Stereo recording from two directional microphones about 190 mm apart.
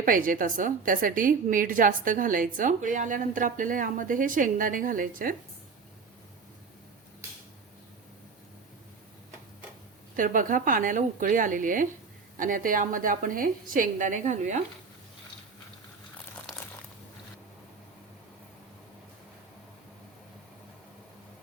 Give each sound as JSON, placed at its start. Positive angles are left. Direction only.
{"t": 0.0, "sound": "a woman's voice", "side_deg": -45}
{"t": 10.2, "sound": "a woman's voice", "side_deg": -45}